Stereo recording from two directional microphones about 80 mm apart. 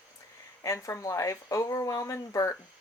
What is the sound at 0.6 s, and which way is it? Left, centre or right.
Speech, left.